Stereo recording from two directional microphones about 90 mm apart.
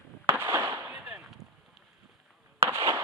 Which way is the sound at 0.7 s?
25° right (ahead or behind).